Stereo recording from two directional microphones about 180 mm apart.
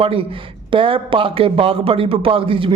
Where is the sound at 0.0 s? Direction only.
30° right (ahead or behind).